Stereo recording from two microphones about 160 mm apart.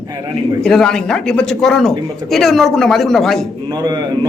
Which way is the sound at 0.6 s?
5° left (ahead or behind).